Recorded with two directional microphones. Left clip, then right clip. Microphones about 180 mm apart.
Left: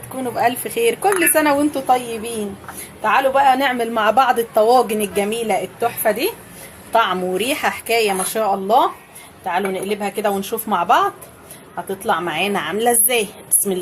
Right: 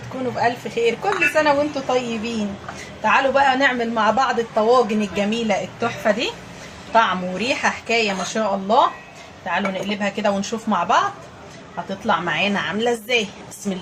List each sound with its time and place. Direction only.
0.3 s a woman's voice: 60° left (ahead or behind)
3.0 s a woman's voice: 55° left (ahead or behind)
12.0 s speech: 55° left (ahead or behind)